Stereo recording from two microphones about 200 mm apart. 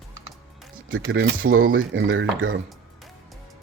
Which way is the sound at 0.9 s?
75° right (ahead or behind).